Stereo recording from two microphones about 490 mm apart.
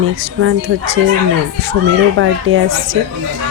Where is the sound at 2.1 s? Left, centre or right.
Right.